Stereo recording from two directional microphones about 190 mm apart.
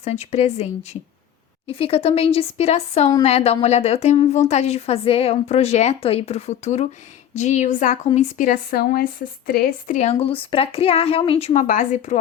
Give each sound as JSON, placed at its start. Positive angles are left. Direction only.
{"t": 0.0, "sound": "a woman's voice", "side_deg": 35}